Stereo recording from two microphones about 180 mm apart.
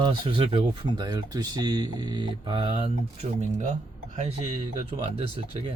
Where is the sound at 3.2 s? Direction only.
45° right (ahead or behind).